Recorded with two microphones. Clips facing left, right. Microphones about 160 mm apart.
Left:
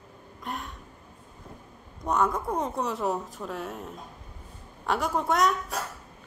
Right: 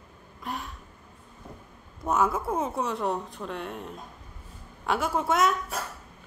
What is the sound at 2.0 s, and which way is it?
Speech, 5° right (ahead or behind).